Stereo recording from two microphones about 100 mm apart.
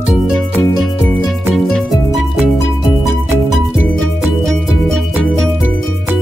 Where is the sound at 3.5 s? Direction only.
Centre (ahead or behind).